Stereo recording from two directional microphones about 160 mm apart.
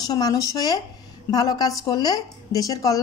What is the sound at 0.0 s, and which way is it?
A woman's voice, 25° left (ahead or behind).